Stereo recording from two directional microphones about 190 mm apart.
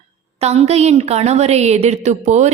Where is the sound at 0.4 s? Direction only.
35° right (ahead or behind).